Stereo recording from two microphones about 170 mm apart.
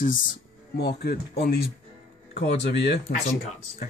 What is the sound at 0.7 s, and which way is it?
Speech, 75° left (ahead or behind).